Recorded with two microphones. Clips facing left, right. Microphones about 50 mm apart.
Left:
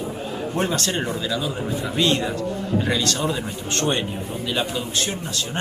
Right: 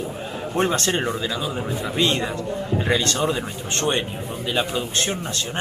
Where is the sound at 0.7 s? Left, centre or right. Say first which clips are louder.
Right 2 dB; right.